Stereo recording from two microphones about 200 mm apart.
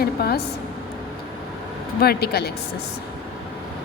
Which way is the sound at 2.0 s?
50° left (ahead or behind).